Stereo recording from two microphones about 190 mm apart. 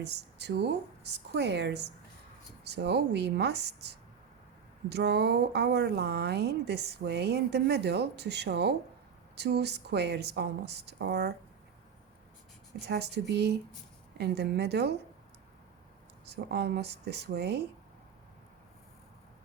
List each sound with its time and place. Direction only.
0.0 s speech: 60° right (ahead or behind)
12.8 s speech: 60° right (ahead or behind)
16.2 s speech: 60° right (ahead or behind)